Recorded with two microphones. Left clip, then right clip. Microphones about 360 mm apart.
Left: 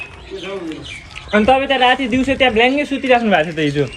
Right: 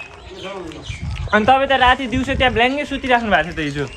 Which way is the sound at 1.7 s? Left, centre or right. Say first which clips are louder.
Left 1 dB; right.